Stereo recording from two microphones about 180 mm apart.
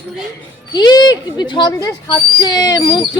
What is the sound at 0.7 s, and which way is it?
Speech, 20° left (ahead or behind).